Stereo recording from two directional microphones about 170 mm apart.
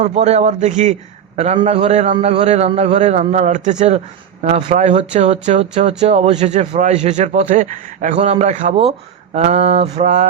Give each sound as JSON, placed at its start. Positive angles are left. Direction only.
{"t": 0.0, "sound": "a man's voice", "side_deg": -40}
{"t": 8.7, "sound": "a man's voice", "side_deg": -35}